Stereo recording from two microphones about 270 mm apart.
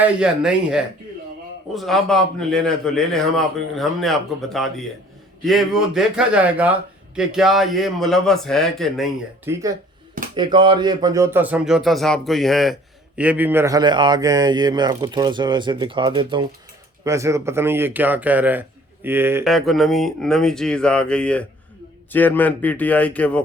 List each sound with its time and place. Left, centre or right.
0.0 s a man's voice: centre